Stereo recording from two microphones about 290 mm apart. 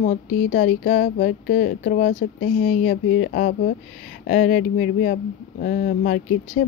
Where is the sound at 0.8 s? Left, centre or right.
Left.